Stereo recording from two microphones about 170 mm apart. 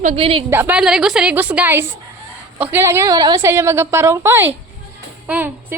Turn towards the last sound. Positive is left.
turn(degrees=-10)  # may be behind; listen again after turning